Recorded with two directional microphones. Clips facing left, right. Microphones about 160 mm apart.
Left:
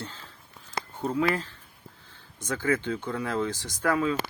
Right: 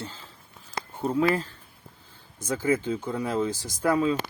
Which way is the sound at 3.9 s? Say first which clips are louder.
Right 3 dB; 25° right (ahead or behind).